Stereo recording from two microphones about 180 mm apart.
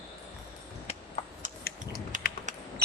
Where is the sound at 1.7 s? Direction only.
55° left (ahead or behind).